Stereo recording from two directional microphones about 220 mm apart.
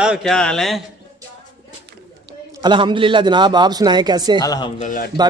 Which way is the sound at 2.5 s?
20° right (ahead or behind).